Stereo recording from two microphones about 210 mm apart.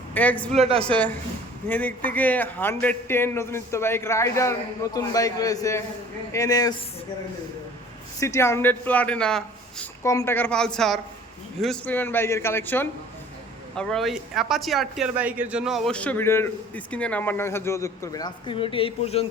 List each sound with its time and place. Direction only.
0.1 s speech: 5° left (ahead or behind)
0.5 s a woman's voice: 30° right (ahead or behind)
0.8 s a man's voice: 5° left (ahead or behind)
8.2 s speech: 15° left (ahead or behind)